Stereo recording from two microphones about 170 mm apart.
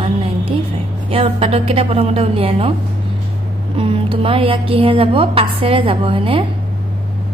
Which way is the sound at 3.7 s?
30° right (ahead or behind).